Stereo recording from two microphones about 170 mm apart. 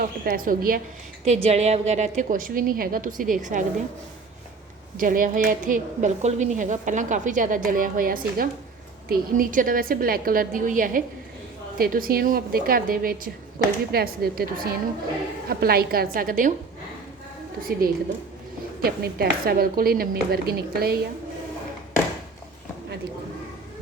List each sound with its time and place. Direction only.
0.0 s a woman's voice: 55° right (ahead or behind)
1.2 s a woman's voice: 40° right (ahead or behind)
4.9 s a woman's voice: 55° right (ahead or behind)
17.6 s a woman's voice: 60° right (ahead or behind)